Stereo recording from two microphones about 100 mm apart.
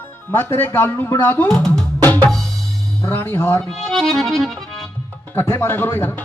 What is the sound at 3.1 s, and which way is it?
Music, 25° left (ahead or behind).